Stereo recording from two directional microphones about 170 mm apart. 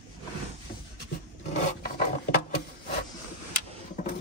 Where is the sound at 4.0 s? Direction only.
45° left (ahead or behind).